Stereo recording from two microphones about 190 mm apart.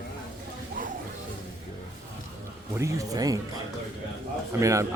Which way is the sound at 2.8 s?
15° right (ahead or behind).